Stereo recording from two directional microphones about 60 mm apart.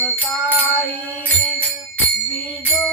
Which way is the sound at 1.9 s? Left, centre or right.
Left.